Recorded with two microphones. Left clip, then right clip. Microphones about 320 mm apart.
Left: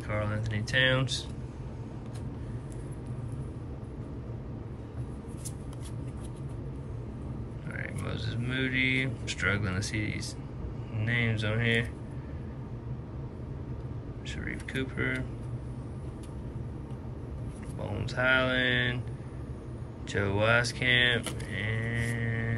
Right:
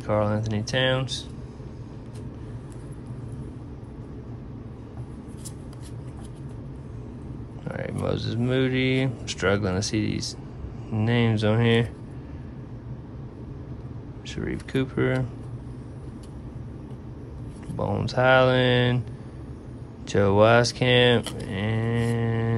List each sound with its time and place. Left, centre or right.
0.0 s speech: centre
7.6 s speech: centre
14.3 s speech: centre
17.9 s speech: centre
20.1 s speech: centre